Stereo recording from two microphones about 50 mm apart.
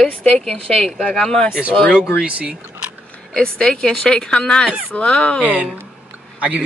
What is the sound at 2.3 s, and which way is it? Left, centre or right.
Speech, right.